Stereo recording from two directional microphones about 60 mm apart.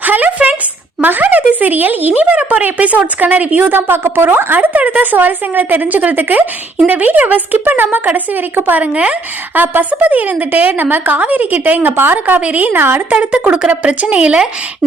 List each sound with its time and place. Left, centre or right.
0.0 s a sound: right
1.0 s speech: right
13.1 s speech: centre